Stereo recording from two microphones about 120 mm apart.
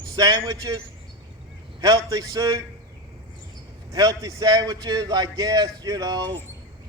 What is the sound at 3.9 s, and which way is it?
A man's voice, 30° right (ahead or behind).